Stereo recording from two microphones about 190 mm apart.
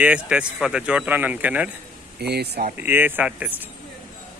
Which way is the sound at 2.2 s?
60° right (ahead or behind).